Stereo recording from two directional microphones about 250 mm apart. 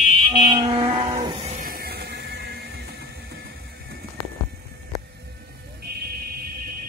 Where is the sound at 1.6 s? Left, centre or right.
Right.